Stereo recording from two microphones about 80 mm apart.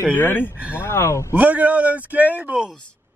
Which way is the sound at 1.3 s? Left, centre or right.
Centre.